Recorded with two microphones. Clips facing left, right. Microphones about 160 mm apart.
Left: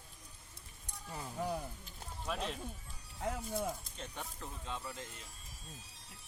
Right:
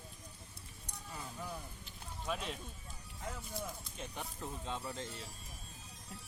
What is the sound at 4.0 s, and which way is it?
Speech, 15° right (ahead or behind).